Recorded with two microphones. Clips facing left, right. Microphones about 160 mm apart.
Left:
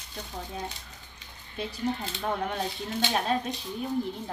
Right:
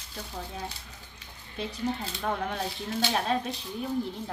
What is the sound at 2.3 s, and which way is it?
Speech, centre (ahead or behind).